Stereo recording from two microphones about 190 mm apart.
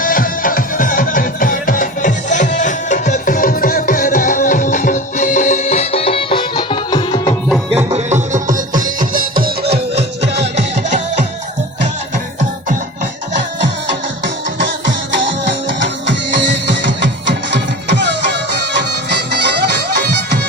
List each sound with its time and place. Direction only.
0.0 s music: 45° left (ahead or behind); by 7.3 s 25° left (ahead or behind)
7.9 s music: 40° right (ahead or behind)
9.7 s music: 35° right (ahead or behind)
10.4 s music: 65° right (ahead or behind)
14.6 s music: 70° right (ahead or behind)